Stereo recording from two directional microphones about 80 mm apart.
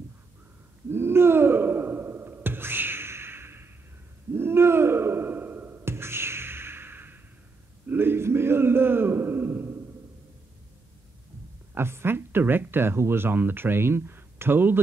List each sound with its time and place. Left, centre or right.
0.8 s gasp: right
4.3 s sigh: right
7.8 s a sound: right
11.7 s speech: right